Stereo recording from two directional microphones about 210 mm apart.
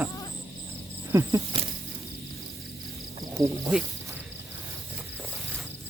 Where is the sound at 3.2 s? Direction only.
15° right (ahead or behind).